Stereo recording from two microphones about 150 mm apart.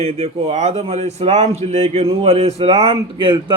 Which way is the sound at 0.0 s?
45° right (ahead or behind).